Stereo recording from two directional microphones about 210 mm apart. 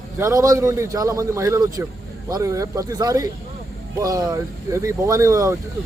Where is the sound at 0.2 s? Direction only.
15° right (ahead or behind).